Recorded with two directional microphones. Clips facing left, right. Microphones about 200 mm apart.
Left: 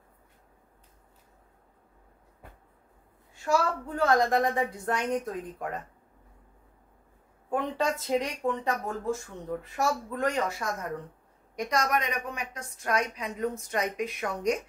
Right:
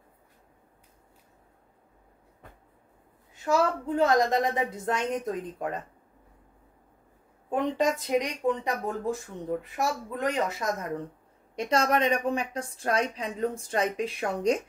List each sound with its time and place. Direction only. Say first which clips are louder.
3.3 s a woman's voice: right 2 dB; 20° right (ahead or behind)
7.4 s a woman's voice: right 3 dB; 20° right (ahead or behind)